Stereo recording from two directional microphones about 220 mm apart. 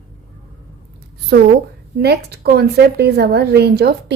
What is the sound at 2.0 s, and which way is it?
A woman's voice, 45° right (ahead or behind).